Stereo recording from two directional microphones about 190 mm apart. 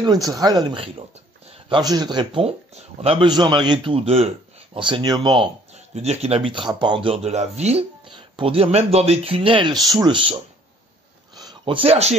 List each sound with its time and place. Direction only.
0.0 s speech: 20° right (ahead or behind)
11.3 s speech: 25° right (ahead or behind)